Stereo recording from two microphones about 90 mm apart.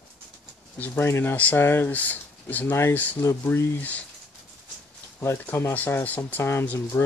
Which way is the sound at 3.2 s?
30° left (ahead or behind).